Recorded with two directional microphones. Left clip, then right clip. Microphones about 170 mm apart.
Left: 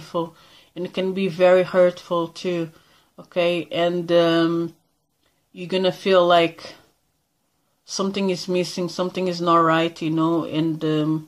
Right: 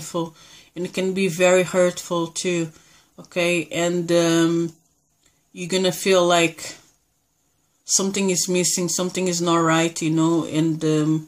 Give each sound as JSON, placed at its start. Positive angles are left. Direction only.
{"t": 0.0, "sound": "speech", "side_deg": -15}
{"t": 7.8, "sound": "speech", "side_deg": -15}